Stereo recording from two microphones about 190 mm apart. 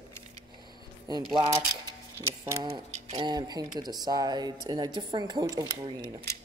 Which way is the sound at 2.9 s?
35° right (ahead or behind).